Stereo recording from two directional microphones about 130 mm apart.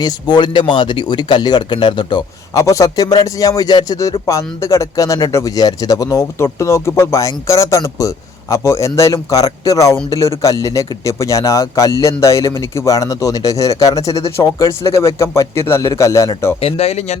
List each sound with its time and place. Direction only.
0.0 s speech: 35° left (ahead or behind)
16.6 s speech: 50° left (ahead or behind)